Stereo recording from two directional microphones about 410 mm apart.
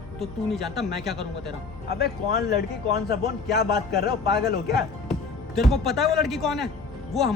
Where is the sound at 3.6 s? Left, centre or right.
Left.